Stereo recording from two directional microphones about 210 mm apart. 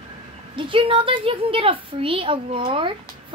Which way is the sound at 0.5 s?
25° right (ahead or behind).